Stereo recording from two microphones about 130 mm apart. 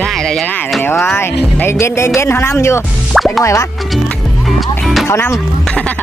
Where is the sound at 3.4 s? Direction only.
25° left (ahead or behind).